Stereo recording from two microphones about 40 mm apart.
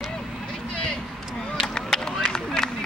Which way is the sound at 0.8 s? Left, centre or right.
Centre.